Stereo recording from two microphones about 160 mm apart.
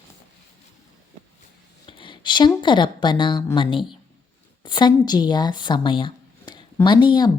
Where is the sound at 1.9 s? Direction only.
30° left (ahead or behind).